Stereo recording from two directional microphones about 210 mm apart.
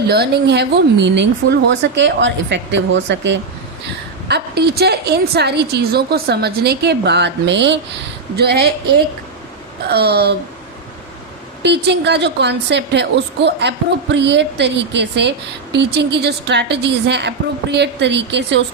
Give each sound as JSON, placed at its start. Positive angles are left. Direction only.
{"t": 0.1, "sound": "a woman's voice", "side_deg": -50}
{"t": 9.8, "sound": "a woman's voice", "side_deg": -50}
{"t": 11.6, "sound": "a woman's voice", "side_deg": -55}